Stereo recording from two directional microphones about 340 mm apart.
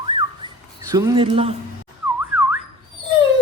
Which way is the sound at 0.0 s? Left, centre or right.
Centre.